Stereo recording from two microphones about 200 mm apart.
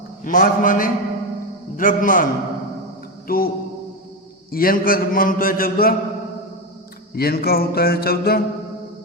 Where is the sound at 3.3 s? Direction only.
45° left (ahead or behind).